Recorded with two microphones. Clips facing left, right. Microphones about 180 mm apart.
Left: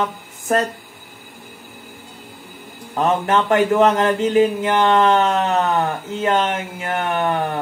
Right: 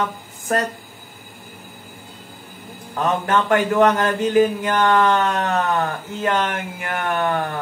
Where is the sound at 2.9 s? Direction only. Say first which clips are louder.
Left 2 dB; 25° left (ahead or behind).